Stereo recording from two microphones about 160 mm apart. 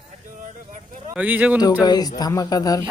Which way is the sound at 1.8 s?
25° left (ahead or behind).